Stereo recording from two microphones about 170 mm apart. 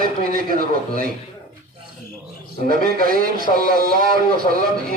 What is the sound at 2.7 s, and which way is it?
A man's voice, 60° right (ahead or behind).